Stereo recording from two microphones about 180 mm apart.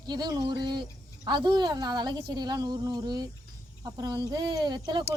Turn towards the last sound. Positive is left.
turn(degrees=-25)  # may be behind; listen again after turning